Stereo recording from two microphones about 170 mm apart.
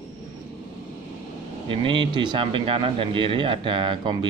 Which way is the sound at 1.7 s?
30° right (ahead or behind).